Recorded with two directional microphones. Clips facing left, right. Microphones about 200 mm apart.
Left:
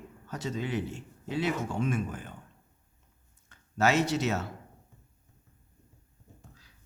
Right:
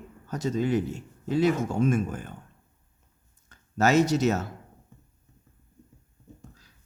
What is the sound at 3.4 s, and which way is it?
Speech, 40° right (ahead or behind).